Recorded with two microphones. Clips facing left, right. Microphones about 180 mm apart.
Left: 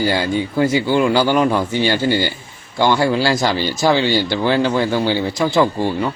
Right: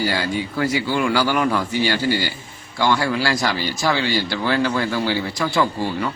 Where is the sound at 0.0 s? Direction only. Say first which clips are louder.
Left 4 dB; 25° left (ahead or behind).